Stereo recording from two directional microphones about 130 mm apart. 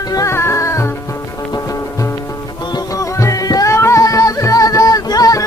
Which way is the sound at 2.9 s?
25° left (ahead or behind).